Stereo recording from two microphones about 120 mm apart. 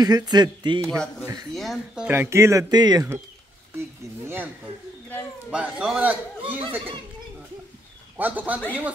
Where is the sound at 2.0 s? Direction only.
20° right (ahead or behind); by 3.0 s 35° right (ahead or behind).